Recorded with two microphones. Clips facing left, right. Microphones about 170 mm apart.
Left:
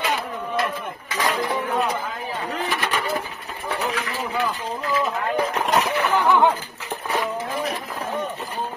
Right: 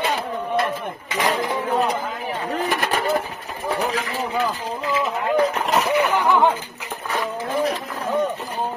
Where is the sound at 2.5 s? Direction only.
45° right (ahead or behind).